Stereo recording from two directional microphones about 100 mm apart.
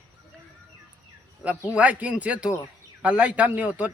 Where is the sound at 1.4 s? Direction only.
10° right (ahead or behind).